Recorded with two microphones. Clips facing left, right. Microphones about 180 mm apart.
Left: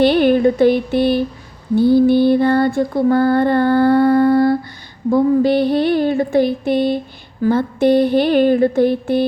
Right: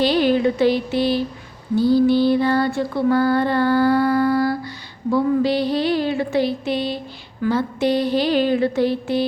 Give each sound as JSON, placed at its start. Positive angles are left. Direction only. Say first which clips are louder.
{"t": 0.0, "sound": "a sound", "louder": "left 5 dB", "side_deg": 55}
{"t": 1.7, "sound": "music", "louder": "left 4 dB", "side_deg": 55}
{"t": 4.1, "sound": "humming", "louder": "left 6 dB", "side_deg": 25}
{"t": 5.1, "sound": "music", "louder": "left 5 dB", "side_deg": 50}